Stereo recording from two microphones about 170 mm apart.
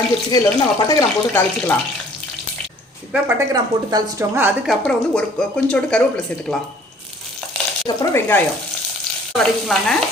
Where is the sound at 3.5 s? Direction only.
20° right (ahead or behind).